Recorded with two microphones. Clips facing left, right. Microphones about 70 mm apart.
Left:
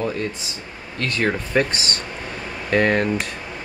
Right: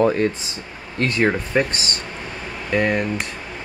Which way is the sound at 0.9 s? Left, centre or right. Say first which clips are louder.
Right 3 dB; right.